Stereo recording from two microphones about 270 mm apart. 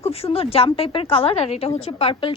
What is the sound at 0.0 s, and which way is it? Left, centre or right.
A woman's voice, left.